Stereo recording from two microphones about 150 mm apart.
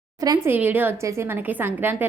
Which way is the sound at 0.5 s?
10° right (ahead or behind).